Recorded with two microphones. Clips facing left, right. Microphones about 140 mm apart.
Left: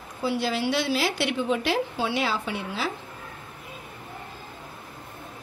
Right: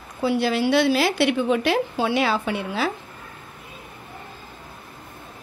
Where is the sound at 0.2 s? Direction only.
65° right (ahead or behind).